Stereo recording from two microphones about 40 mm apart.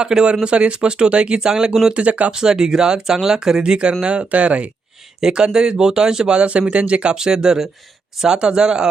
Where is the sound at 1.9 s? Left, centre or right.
Right.